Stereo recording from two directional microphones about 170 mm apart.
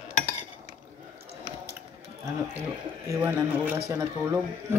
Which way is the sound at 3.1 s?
15° right (ahead or behind).